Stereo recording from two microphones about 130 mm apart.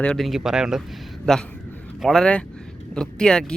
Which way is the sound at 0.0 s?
5° left (ahead or behind).